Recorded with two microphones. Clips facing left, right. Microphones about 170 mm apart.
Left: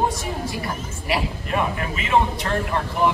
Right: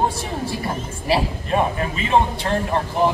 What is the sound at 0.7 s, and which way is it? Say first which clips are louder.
A man's voice: right 4 dB; 30° right (ahead or behind).